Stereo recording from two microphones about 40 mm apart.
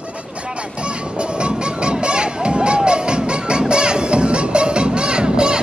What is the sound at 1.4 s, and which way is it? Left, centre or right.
Music, right.